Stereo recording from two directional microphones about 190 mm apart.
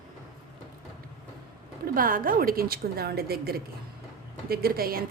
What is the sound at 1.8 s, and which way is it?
A woman's voice, 50° right (ahead or behind).